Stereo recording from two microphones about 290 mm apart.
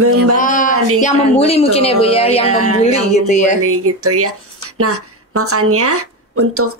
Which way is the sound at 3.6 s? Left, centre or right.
Right.